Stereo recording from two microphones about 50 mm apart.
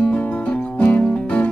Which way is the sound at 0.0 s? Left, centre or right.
Left.